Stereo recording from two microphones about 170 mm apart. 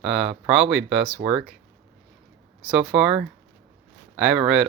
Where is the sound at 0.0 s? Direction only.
5° right (ahead or behind).